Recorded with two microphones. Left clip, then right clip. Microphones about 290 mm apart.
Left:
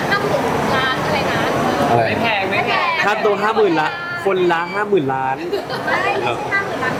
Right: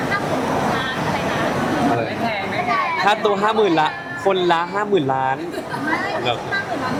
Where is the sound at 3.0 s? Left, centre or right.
Centre.